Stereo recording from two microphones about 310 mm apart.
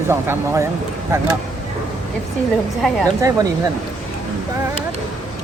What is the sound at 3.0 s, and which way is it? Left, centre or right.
Speech, centre.